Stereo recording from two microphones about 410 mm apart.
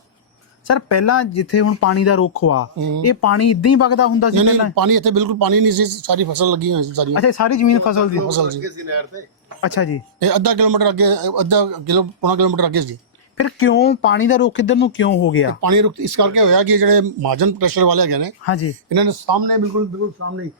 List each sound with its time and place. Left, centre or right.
0.7 s speech: left
4.4 s a man's voice: right
7.1 s speech: left
8.3 s a man's voice: right
8.6 s speech: right
9.6 s speech: left
10.2 s a man's voice: right
13.3 s speech: left
15.6 s a man's voice: right
18.4 s speech: left
18.9 s a man's voice: right
20.1 s speech: right